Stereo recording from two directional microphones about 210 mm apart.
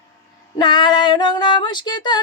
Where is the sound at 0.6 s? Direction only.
20° left (ahead or behind).